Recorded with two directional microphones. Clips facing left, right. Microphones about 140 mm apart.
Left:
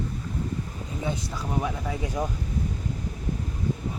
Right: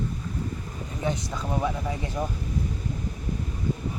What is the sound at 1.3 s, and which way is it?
Speech, 10° left (ahead or behind).